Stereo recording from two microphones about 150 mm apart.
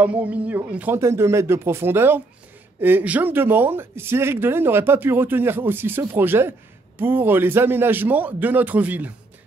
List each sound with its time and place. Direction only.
0.0 s speech: 10° right (ahead or behind)